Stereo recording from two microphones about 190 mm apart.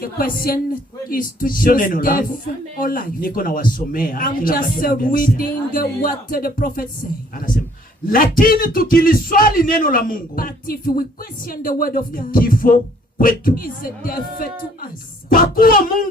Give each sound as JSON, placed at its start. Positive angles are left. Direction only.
{"t": 0.0, "sound": "a man's voice", "side_deg": 50}